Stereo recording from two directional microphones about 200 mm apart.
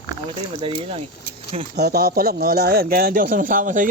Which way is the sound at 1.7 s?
50° right (ahead or behind).